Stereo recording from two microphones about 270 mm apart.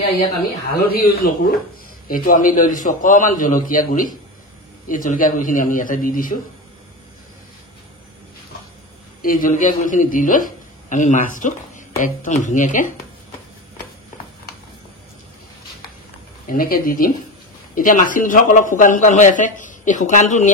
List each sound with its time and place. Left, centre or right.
0.9 s a man's voice: left
9.2 s a man's voice: left
16.4 s a man's voice: left